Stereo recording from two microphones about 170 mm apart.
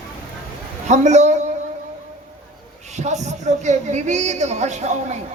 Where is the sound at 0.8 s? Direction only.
45° right (ahead or behind).